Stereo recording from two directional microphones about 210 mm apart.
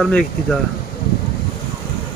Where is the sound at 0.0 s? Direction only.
Centre (ahead or behind).